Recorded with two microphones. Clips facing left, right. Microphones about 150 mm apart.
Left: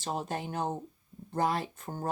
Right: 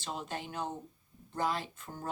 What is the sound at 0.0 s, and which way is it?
Speech, 45° left (ahead or behind).